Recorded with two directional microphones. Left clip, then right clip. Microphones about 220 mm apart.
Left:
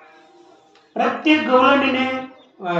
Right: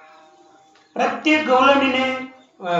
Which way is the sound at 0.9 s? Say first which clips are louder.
Left 1 dB; 30° right (ahead or behind).